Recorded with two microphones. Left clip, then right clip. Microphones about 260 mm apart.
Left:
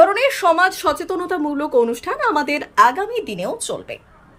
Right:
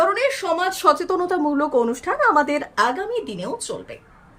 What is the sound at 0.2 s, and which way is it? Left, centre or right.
Speech, centre.